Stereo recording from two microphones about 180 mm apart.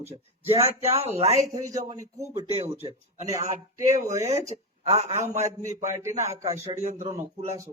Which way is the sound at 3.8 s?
15° right (ahead or behind).